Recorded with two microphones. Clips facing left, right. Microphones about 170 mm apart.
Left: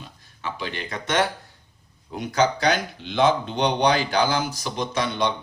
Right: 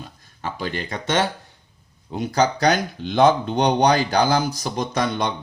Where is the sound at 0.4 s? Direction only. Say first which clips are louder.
Right 3 dB; 40° right (ahead or behind).